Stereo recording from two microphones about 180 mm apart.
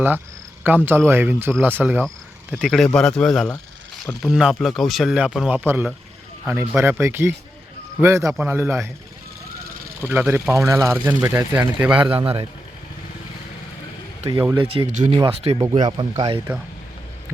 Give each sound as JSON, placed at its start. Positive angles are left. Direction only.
{"t": 0.9, "sound": "speech", "side_deg": -10}
{"t": 10.0, "sound": "speech", "side_deg": -10}
{"t": 12.0, "sound": "speech", "side_deg": -30}
{"t": 14.3, "sound": "speech", "side_deg": -20}
{"t": 14.6, "sound": "speech", "side_deg": -35}